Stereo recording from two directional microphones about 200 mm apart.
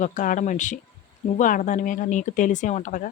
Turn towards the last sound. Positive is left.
turn(degrees=40)  # may be behind; listen again after turning